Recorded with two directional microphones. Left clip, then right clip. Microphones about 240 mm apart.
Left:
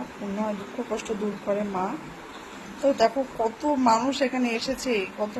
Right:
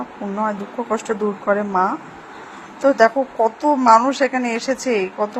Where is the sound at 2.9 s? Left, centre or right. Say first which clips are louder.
Right 8 dB; centre.